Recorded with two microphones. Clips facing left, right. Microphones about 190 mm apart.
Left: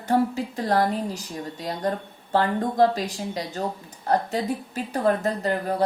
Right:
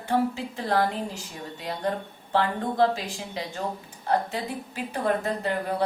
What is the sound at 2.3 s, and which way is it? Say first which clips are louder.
A woman's voice: left 3 dB; 45° left (ahead or behind).